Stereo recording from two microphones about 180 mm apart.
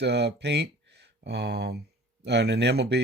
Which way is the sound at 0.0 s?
70° right (ahead or behind).